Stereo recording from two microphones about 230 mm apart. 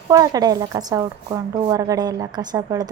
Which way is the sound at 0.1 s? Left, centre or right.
Centre.